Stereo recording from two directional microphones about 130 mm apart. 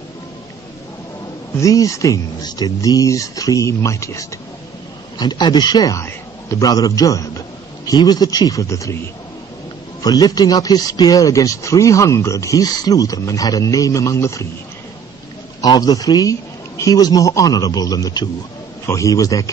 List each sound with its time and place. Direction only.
1.6 s speech: 25° left (ahead or behind)
5.2 s speech: 30° left (ahead or behind)
10.0 s speech: 30° left (ahead or behind)
15.6 s speech: 30° left (ahead or behind)